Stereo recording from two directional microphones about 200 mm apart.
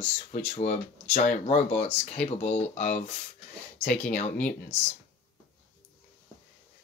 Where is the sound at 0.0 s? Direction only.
35° left (ahead or behind).